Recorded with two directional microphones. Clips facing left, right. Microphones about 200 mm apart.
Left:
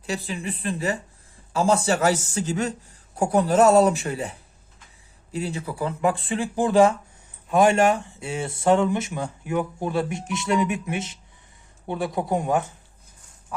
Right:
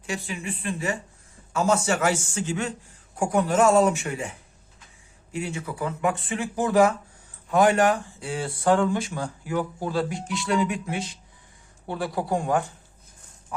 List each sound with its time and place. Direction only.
0.0 s speech: 35° left (ahead or behind); by 12.7 s 20° left (ahead or behind)